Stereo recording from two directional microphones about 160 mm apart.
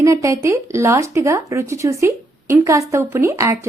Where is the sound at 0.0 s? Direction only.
20° right (ahead or behind).